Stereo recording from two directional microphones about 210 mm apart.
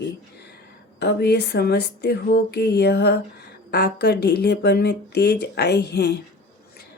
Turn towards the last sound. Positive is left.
turn(degrees=50)  # may be behind; listen again after turning